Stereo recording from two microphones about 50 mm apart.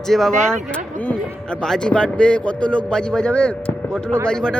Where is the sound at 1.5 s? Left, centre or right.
Centre.